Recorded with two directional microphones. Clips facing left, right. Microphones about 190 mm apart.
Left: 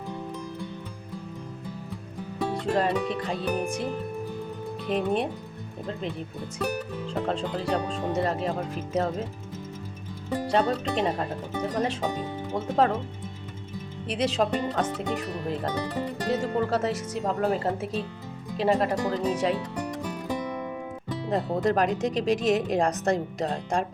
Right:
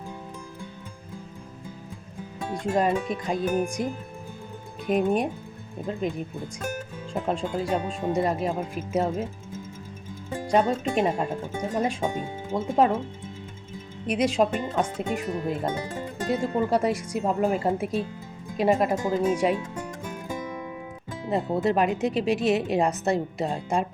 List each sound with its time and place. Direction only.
2.7 s speech: 10° right (ahead or behind)
4.9 s speech: 10° right (ahead or behind)
6.1 s speech: 45° right (ahead or behind)
7.1 s speech: 10° right (ahead or behind)
10.4 s speech: 10° right (ahead or behind)
14.1 s speech: 10° right (ahead or behind)
21.2 s speech: 5° right (ahead or behind)